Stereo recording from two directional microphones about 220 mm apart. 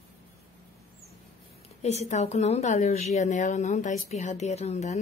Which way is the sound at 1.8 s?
30° left (ahead or behind).